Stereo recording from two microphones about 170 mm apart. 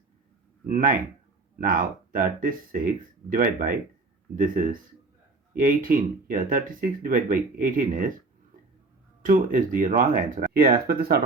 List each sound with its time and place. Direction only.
0.6 s speech: 55° right (ahead or behind)
9.2 s speech: 55° right (ahead or behind)